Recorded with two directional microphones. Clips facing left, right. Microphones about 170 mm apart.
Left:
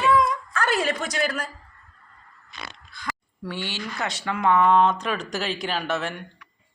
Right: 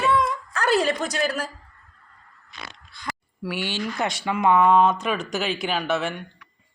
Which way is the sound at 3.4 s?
10° right (ahead or behind).